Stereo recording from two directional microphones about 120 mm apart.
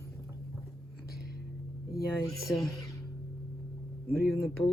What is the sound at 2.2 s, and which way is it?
Music, 25° left (ahead or behind).